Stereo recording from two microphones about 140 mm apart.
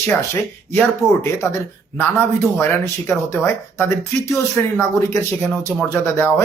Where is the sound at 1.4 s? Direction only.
20° left (ahead or behind).